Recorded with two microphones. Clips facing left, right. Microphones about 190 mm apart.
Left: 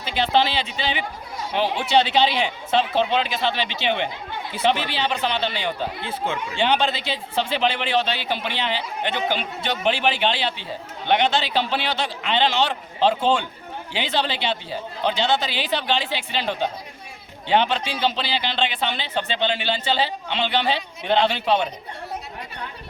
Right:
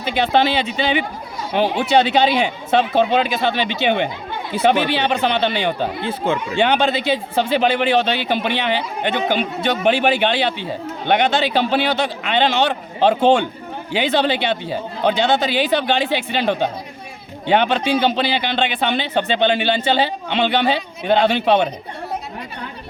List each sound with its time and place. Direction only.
0.0 s speech: 55° right (ahead or behind)
13.9 s speech: 50° right (ahead or behind)